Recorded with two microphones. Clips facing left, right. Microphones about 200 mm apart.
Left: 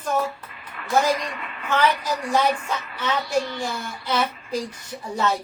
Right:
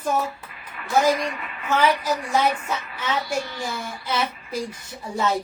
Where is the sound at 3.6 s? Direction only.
5° right (ahead or behind).